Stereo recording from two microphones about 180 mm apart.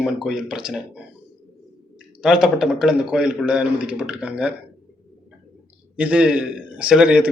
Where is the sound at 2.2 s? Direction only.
5° right (ahead or behind).